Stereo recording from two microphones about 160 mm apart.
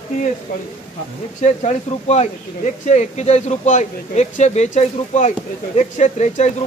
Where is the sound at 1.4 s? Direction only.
45° left (ahead or behind).